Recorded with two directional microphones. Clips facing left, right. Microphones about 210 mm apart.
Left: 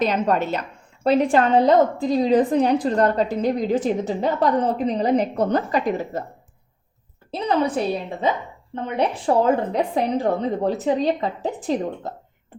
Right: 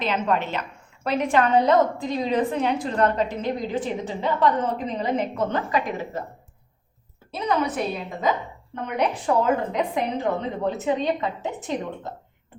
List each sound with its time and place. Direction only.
0.0 s a woman's voice: 40° left (ahead or behind)
7.3 s a woman's voice: 30° left (ahead or behind)